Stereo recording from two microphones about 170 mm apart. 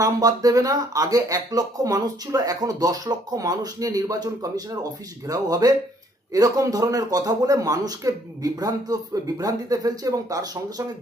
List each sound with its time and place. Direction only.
0.0 s speech: 20° right (ahead or behind)